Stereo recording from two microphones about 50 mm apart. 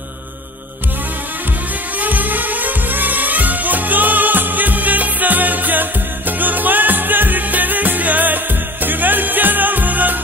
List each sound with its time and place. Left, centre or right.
2.0 s music: right